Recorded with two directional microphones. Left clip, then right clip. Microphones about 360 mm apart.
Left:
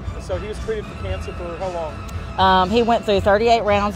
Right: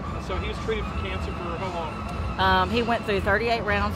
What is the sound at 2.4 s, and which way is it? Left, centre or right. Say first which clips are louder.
Speech: left 7 dB; left.